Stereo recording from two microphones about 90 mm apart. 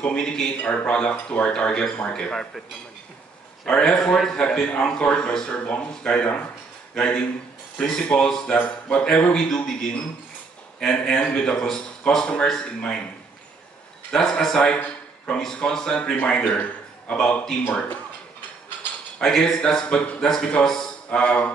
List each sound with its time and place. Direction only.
0.0 s a man's voice: 10° left (ahead or behind)
3.6 s a man's voice: 10° left (ahead or behind)
14.1 s a man's voice: 5° left (ahead or behind)
19.1 s a man's voice: 5° left (ahead or behind)